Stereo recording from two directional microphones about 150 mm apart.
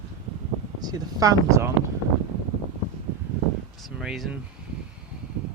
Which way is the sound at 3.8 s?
Centre (ahead or behind).